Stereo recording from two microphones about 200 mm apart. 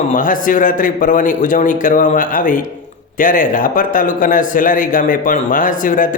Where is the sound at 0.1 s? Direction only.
40° left (ahead or behind).